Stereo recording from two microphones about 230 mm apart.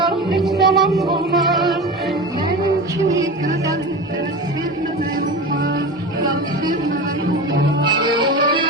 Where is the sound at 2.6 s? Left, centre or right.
Centre.